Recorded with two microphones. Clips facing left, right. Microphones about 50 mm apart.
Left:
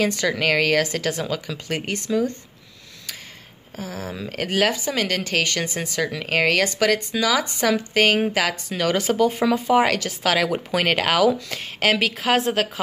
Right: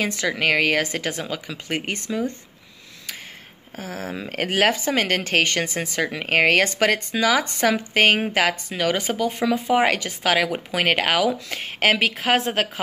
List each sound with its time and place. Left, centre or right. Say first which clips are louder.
0.0 s a woman's voice: left 1 dB; centre
3.7 s speech: right 1 dB; right
8.6 s speech: left 1 dB; centre
9.2 s speech: left 3 dB; centre
9.7 s a woman's voice: even; centre